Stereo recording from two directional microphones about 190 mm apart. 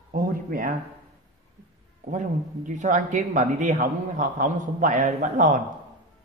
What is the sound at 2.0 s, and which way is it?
Speech, 40° right (ahead or behind).